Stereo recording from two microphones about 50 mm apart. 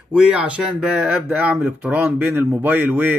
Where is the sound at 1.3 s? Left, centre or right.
Right.